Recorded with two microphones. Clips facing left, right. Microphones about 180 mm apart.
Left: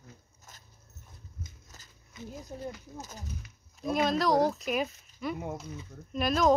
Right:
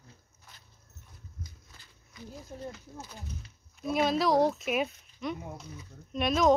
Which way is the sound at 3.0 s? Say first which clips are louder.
Left 1 dB; 40° left (ahead or behind).